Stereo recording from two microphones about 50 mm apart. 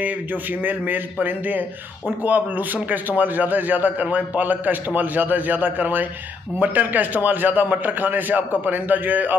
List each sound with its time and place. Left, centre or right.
0.0 s speech: right